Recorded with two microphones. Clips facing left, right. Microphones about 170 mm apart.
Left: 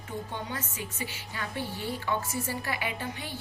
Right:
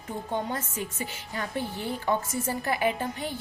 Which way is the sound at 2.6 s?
40° right (ahead or behind).